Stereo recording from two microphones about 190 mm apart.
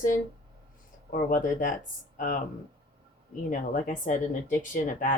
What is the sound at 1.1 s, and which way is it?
Speech, 45° left (ahead or behind).